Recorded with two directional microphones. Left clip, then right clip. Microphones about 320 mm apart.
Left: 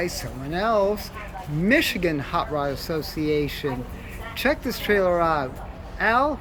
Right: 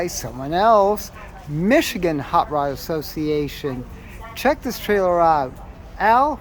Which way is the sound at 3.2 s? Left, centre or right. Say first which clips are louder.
Right 1 dB; right.